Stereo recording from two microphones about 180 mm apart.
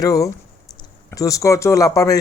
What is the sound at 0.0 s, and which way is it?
Speech, 20° left (ahead or behind).